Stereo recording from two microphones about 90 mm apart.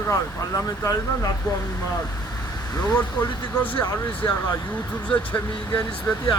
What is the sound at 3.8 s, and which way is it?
Speech, 30° left (ahead or behind).